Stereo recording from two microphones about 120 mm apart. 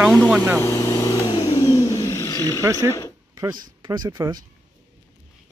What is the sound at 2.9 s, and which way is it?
Speech, 30° left (ahead or behind).